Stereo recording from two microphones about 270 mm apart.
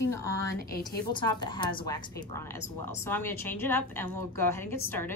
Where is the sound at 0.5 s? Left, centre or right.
Left.